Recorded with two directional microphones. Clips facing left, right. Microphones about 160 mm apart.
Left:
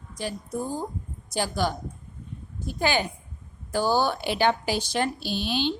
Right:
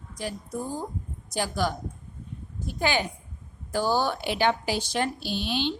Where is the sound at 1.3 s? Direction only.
30° left (ahead or behind).